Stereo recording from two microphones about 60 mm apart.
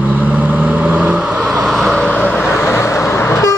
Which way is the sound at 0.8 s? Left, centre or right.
Right.